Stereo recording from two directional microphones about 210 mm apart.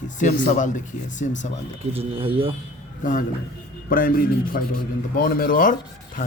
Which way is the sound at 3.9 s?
40° left (ahead or behind).